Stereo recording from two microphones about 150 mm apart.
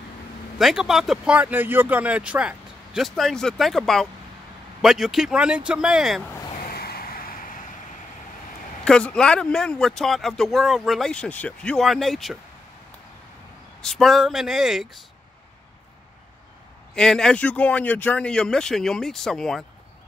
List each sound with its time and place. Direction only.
0.6 s speech: centre (ahead or behind)
6.6 s vehicle: 90° left; by 7.6 s 70° left (ahead or behind)
8.8 s speech: 5° left (ahead or behind)
13.7 s speech: centre (ahead or behind)
16.9 s speech: 5° left (ahead or behind)